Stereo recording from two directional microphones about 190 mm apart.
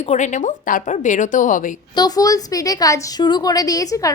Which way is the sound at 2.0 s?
20° left (ahead or behind).